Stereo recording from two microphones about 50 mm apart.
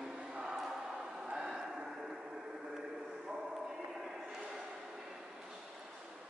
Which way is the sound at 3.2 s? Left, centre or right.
Centre.